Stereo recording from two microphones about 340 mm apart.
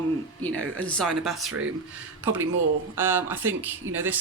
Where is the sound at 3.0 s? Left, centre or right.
Centre.